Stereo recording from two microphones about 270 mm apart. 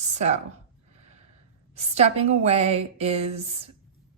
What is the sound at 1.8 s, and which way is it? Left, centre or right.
A woman's voice, right.